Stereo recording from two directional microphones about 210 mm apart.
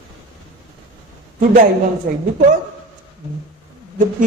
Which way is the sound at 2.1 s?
45° right (ahead or behind).